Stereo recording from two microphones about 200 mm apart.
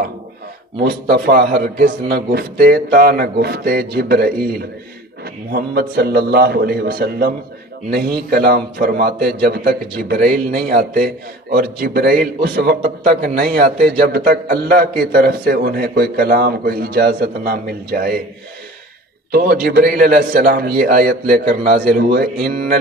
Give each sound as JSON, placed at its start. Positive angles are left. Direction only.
{"t": 0.8, "sound": "a man's voice", "side_deg": -50}
{"t": 19.3, "sound": "a man's voice", "side_deg": -50}